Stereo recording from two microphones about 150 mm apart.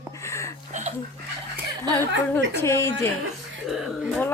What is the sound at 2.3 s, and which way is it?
Speech, 20° left (ahead or behind).